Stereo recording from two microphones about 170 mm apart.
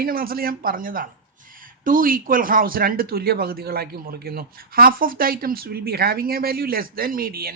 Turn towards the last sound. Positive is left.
turn(degrees=-60)  # may be behind; listen again after turning